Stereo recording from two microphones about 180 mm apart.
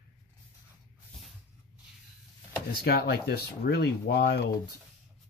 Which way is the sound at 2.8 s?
60° left (ahead or behind).